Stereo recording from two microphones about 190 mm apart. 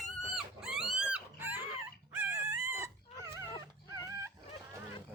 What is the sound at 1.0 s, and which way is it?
Dog, 10° right (ahead or behind).